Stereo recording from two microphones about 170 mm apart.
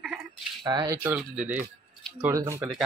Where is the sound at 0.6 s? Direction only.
25° right (ahead or behind); by 1.6 s 10° right (ahead or behind).